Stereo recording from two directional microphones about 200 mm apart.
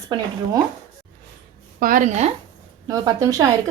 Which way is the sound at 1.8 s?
40° right (ahead or behind).